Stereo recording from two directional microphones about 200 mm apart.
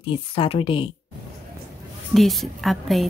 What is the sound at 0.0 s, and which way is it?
Speech, 25° left (ahead or behind).